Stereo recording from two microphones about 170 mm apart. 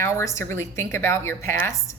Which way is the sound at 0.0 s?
15° left (ahead or behind).